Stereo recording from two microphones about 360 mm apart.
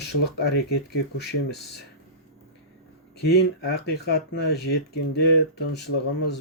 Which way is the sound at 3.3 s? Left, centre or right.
Left.